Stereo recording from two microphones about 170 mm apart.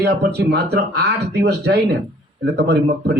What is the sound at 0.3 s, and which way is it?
Speech, 75° right (ahead or behind).